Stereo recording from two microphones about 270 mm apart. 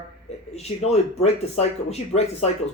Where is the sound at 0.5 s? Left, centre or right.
Left.